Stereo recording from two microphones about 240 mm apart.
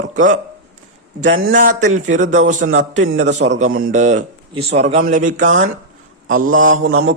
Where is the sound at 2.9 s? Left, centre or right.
Right.